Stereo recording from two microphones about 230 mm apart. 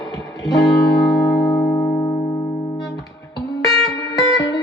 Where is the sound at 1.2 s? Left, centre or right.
Centre.